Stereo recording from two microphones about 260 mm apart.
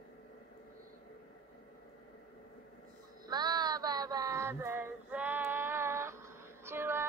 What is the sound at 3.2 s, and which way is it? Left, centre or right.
Child singing, centre.